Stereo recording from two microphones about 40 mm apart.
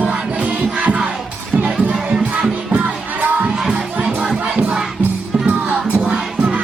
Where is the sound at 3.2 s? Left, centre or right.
Right.